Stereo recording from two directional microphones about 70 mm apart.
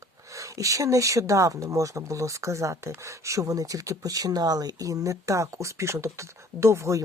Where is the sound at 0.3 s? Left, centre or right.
Right.